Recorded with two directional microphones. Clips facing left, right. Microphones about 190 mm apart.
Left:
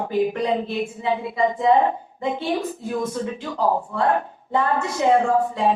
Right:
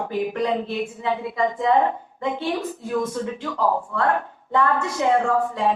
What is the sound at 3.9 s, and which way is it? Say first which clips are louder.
A woman's voice: left 1 dB; 20° left (ahead or behind).